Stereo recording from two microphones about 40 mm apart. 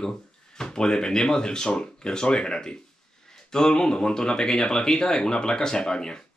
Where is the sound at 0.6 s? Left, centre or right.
Centre.